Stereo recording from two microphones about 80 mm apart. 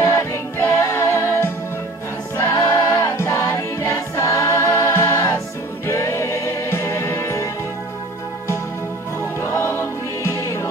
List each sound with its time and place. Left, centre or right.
0.0 s music: left
2.3 s choir: left
2.7 s music: left
3.2 s music: left
9.4 s choir: left